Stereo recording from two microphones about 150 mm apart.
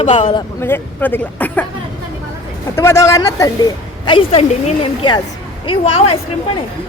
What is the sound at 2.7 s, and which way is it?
Speech, 20° left (ahead or behind).